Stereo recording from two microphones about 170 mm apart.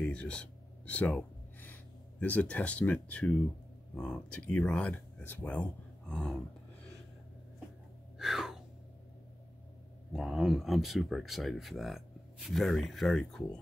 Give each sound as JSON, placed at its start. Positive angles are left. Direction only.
{"t": 0.0, "sound": "a sound", "side_deg": 5}
{"t": 3.9, "sound": "speech", "side_deg": 5}
{"t": 8.2, "sound": "gasp", "side_deg": 0}
{"t": 10.1, "sound": "speech", "side_deg": -5}